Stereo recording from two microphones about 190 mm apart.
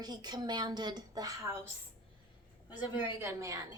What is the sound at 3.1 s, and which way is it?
Speech, 15° right (ahead or behind).